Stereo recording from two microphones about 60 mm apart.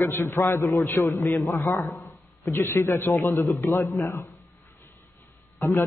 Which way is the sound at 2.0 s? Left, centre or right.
Left.